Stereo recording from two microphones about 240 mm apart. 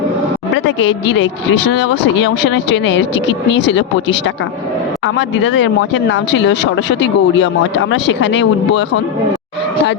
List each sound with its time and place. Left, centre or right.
0.8 s speech: left